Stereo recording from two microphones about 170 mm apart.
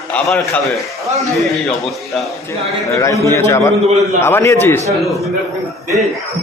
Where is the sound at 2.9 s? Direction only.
20° left (ahead or behind).